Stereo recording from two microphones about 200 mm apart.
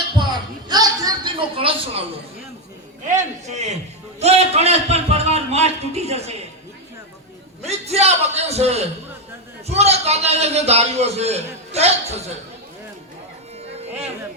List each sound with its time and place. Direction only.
0.7 s a sound: 20° right (ahead or behind)
3.4 s a man's voice: 35° right (ahead or behind)
7.6 s a man's voice: 30° right (ahead or behind)